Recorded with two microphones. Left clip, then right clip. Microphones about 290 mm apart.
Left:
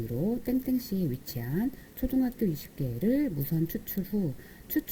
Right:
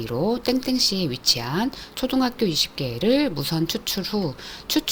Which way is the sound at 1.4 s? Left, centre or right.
Right.